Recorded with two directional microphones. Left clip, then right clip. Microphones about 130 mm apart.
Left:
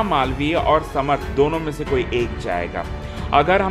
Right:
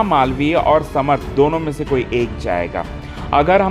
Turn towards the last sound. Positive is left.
turn(degrees=-25)  # may be behind; listen again after turning